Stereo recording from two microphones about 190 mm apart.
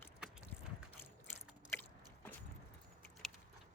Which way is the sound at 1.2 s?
10° left (ahead or behind).